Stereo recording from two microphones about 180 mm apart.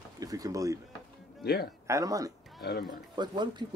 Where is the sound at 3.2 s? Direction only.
25° right (ahead or behind).